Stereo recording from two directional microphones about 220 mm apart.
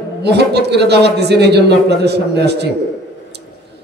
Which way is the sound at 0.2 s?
50° right (ahead or behind).